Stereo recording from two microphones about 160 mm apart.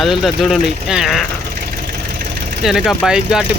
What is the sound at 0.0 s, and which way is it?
Speech, centre (ahead or behind).